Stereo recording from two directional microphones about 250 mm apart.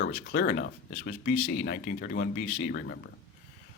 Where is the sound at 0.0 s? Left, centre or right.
Left.